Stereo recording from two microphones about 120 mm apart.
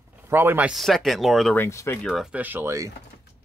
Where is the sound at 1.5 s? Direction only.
20° left (ahead or behind).